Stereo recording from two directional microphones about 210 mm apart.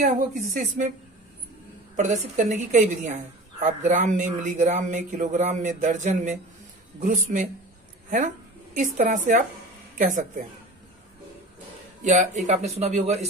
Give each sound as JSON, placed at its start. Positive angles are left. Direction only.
{"t": 0.0, "sound": "a woman's voice", "side_deg": -35}
{"t": 2.0, "sound": "a woman's voice", "side_deg": -35}
{"t": 8.7, "sound": "a woman's voice", "side_deg": -35}
{"t": 12.0, "sound": "a woman's voice", "side_deg": -35}